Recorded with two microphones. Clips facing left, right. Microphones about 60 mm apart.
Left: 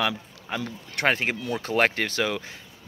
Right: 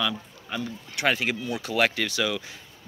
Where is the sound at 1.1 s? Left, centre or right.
Left.